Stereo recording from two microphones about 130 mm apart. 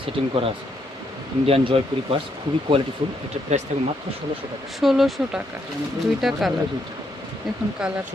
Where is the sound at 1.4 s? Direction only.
45° right (ahead or behind).